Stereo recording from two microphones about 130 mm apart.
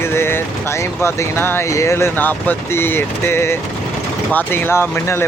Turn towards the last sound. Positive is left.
turn(degrees=20)  # may be behind; listen again after turning